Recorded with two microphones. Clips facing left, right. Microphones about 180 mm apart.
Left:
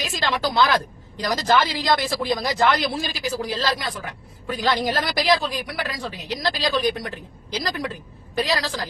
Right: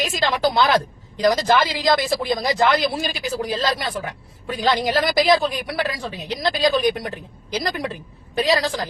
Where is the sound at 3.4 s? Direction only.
20° right (ahead or behind).